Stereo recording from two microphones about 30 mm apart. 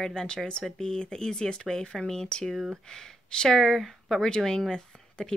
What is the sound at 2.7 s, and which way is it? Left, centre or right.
Speech, centre.